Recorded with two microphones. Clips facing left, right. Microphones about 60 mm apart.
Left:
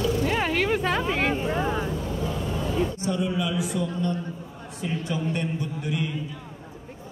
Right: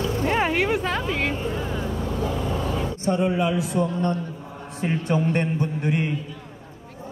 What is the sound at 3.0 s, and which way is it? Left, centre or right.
A man's voice, right.